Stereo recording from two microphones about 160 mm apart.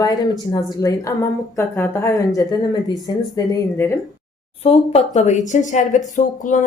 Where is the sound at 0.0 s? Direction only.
25° left (ahead or behind).